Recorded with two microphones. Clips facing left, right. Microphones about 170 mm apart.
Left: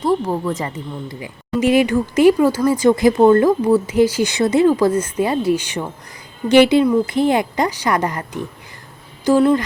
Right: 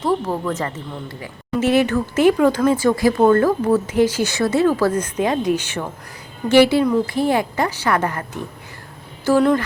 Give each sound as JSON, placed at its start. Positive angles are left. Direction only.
{"t": 0.0, "sound": "speech", "side_deg": 10}
{"t": 9.3, "sound": "speech", "side_deg": 15}